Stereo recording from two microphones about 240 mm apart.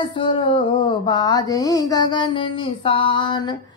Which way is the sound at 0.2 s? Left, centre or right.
Left.